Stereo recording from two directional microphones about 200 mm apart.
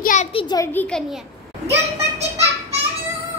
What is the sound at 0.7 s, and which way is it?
Speech, 5° left (ahead or behind).